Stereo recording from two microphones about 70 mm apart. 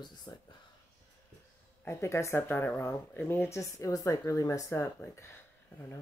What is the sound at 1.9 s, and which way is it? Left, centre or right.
Speech, left.